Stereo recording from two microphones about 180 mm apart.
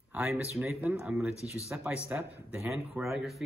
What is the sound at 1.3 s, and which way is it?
Speech, 15° left (ahead or behind).